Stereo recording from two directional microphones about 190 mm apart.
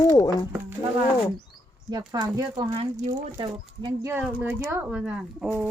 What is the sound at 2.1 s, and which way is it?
Speech, 20° right (ahead or behind).